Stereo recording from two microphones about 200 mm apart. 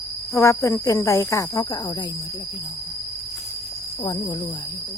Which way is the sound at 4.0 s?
25° left (ahead or behind).